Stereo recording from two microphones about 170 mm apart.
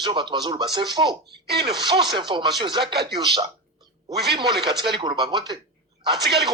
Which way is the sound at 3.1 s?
25° right (ahead or behind).